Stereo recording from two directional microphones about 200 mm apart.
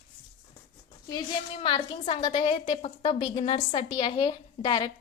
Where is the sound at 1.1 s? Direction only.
25° left (ahead or behind).